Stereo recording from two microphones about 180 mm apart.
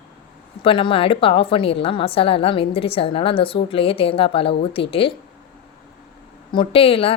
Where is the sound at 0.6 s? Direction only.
30° left (ahead or behind).